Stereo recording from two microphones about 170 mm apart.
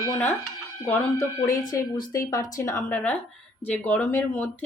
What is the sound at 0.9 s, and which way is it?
Speech, 20° left (ahead or behind).